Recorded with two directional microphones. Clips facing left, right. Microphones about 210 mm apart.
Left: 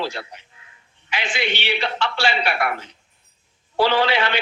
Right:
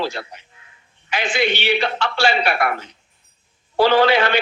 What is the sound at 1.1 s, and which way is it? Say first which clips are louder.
A man's voice: right 5 dB; 45° right (ahead or behind).